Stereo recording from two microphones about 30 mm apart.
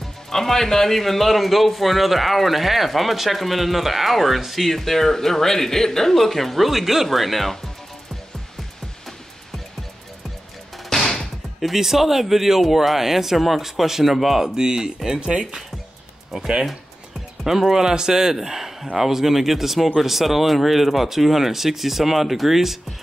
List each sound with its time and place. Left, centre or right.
0.3 s a man's voice: centre
4.6 s a man's voice: centre
10.9 s music: centre
11.6 s speech: centre
14.4 s speech: right
15.1 s speech: right
17.4 s speech: centre